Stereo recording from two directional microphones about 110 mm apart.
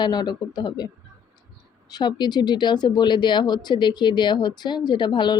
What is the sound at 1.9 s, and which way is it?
Speech, 40° left (ahead or behind).